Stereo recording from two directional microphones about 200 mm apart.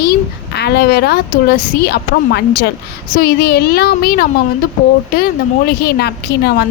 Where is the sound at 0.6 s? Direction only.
55° left (ahead or behind).